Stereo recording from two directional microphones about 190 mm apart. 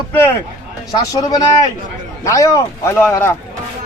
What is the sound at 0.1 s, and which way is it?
A man's voice, 15° left (ahead or behind).